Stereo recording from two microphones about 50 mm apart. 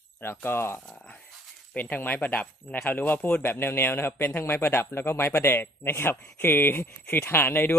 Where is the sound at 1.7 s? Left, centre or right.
Left.